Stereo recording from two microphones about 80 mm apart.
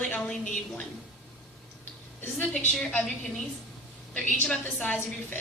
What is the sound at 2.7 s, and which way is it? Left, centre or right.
Speech, centre.